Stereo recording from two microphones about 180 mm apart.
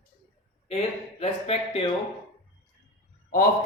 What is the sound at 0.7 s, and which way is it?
Speech, 30° left (ahead or behind).